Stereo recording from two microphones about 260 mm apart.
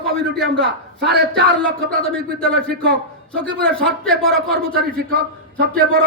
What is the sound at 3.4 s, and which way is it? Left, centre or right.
A man's voice, centre.